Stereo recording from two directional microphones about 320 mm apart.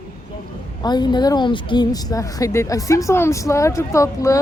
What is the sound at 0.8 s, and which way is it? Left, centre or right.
A woman's voice, centre.